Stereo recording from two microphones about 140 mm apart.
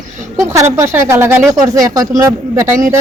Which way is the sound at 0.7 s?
20° right (ahead or behind).